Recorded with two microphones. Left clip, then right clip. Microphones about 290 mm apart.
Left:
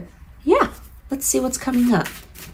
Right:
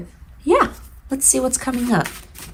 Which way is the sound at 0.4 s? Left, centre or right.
Right.